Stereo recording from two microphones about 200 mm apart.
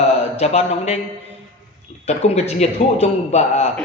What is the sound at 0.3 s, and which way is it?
Speech, 35° left (ahead or behind).